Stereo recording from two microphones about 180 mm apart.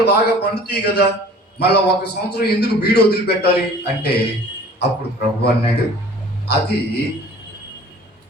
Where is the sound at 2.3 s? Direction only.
65° left (ahead or behind).